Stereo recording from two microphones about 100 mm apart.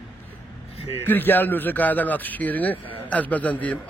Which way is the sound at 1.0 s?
20° left (ahead or behind).